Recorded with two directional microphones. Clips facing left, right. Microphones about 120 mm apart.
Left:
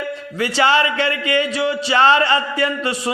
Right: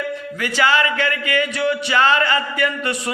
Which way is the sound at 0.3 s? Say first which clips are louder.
Left 2 dB; 25° left (ahead or behind).